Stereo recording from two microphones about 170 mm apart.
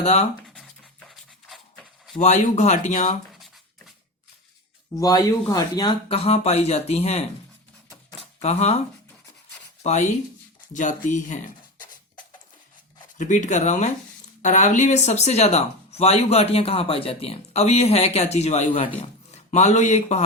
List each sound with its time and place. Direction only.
0.0 s speech: 40° left (ahead or behind)
0.4 s a sound: 5° left (ahead or behind)
2.1 s speech: 45° left (ahead or behind)
3.3 s a sound: centre (ahead or behind)
4.9 s speech: 20° left (ahead or behind)
6.1 s speech: 35° left (ahead or behind)
8.4 s speech: 40° left (ahead or behind)
9.8 s speech: 45° left (ahead or behind)
13.1 s speech: 45° left (ahead or behind)